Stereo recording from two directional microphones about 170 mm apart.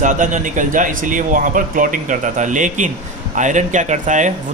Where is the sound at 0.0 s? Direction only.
50° right (ahead or behind).